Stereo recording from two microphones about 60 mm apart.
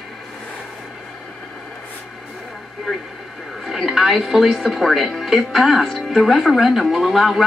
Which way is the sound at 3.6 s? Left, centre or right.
Centre.